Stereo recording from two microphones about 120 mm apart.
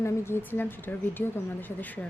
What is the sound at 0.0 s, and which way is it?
Speech, 20° left (ahead or behind).